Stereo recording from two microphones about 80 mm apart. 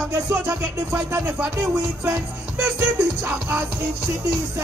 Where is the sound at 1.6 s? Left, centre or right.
Right.